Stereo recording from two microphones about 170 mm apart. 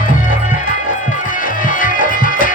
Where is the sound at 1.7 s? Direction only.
55° left (ahead or behind).